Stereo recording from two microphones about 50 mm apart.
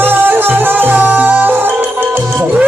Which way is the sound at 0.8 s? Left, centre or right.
Right.